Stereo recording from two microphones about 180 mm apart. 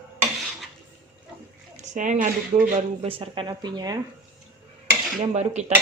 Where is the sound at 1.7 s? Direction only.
45° right (ahead or behind).